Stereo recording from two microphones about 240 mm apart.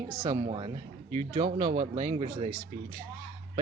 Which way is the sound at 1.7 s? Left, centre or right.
Right.